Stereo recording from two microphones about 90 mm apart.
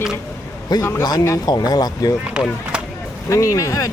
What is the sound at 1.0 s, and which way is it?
Speech, 45° left (ahead or behind).